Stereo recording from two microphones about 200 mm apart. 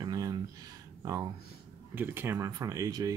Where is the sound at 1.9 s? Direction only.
10° right (ahead or behind).